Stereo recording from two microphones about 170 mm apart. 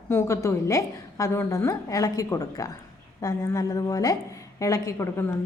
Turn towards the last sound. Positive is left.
turn(degrees=15)  # may be behind; listen again after turning